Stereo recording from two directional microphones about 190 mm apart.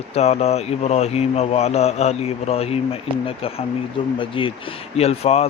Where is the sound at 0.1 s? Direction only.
35° left (ahead or behind).